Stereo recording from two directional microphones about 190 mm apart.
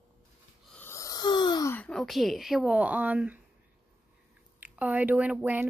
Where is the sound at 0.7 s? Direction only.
15° left (ahead or behind).